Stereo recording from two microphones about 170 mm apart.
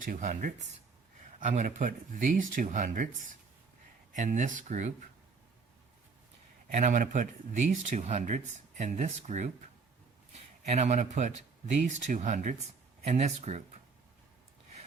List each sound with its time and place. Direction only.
0.0 s speech: 50° right (ahead or behind)
4.1 s speech: 45° right (ahead or behind)
6.7 s speech: 50° right (ahead or behind)
10.7 s speech: 40° right (ahead or behind)